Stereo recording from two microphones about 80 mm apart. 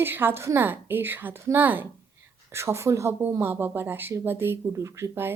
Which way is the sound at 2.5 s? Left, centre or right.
Right.